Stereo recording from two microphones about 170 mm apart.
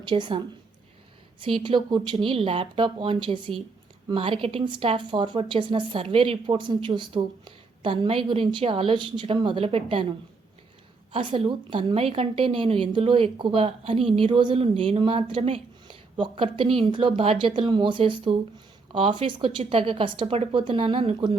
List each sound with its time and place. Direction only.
0.0 s speech: 30° right (ahead or behind)
1.5 s a woman's voice: 30° right (ahead or behind)